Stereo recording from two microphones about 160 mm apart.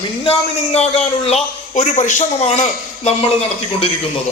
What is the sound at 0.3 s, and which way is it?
A man's voice, 40° left (ahead or behind).